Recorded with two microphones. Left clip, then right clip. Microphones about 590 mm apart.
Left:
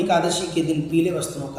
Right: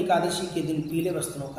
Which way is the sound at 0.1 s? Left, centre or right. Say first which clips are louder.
Left 3 dB; right.